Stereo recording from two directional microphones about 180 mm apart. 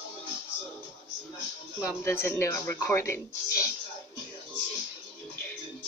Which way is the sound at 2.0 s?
15° left (ahead or behind).